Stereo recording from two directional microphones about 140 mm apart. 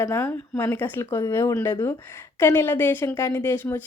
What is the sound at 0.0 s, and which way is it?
A woman's voice, 20° left (ahead or behind).